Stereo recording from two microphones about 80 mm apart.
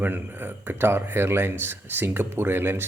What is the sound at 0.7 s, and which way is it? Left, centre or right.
Speech, right.